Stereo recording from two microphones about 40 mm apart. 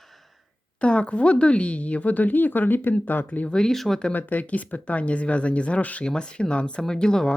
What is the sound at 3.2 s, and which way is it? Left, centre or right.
Speech, left.